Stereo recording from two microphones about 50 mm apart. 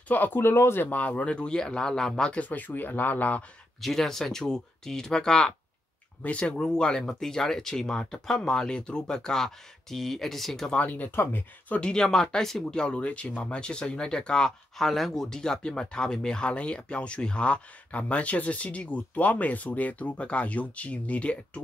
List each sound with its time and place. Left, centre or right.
0.1 s speech: left
0.4 s speech: left
0.8 s speech: left; by 2.3 s centre
2.3 s speech: left
3.8 s speech: centre
6.2 s speech: left
6.5 s speech: centre
10.8 s speech: left
11.7 s speech: left
12.0 s speech: centre
14.9 s speech: centre; by 21.4 s left